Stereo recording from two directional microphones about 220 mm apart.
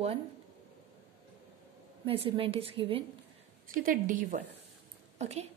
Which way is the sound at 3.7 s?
40° right (ahead or behind).